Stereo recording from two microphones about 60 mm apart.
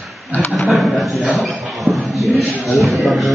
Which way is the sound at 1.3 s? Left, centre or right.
Centre.